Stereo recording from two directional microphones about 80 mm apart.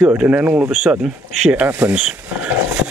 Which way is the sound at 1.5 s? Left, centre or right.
Right.